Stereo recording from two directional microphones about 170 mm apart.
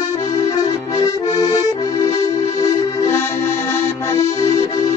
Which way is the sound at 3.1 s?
15° left (ahead or behind).